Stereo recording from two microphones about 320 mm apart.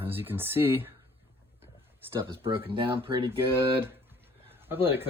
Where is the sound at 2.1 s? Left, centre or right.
Centre.